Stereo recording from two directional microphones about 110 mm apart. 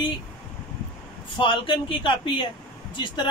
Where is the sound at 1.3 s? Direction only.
50° left (ahead or behind).